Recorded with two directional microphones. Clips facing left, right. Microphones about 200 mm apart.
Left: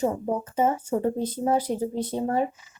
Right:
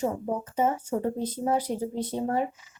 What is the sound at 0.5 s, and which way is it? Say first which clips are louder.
Speech: left 2 dB; 30° left (ahead or behind).